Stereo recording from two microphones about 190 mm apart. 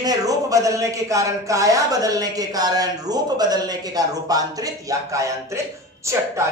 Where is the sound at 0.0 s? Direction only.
20° right (ahead or behind).